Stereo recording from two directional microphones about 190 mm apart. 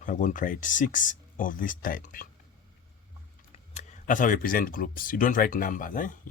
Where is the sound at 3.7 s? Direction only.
45° left (ahead or behind).